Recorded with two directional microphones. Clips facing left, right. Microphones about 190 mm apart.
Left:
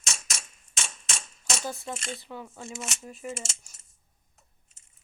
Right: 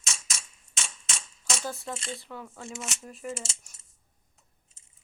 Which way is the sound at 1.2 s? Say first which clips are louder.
Left 3 dB; 70° left (ahead or behind).